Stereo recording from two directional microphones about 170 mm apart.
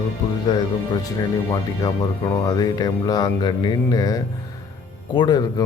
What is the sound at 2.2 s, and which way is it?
Speech, 25° left (ahead or behind).